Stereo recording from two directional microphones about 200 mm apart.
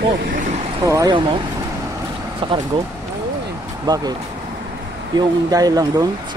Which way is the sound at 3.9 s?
20° right (ahead or behind).